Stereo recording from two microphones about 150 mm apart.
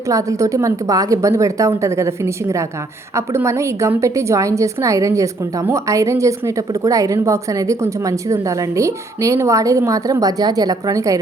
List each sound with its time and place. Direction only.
0.1 s a woman's voice: 20° right (ahead or behind)